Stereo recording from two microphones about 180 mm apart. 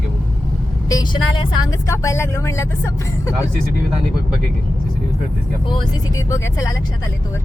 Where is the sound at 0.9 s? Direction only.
25° left (ahead or behind).